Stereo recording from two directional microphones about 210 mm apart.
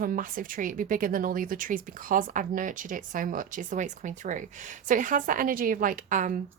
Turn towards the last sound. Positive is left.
turn(degrees=-35)  # may be behind; listen again after turning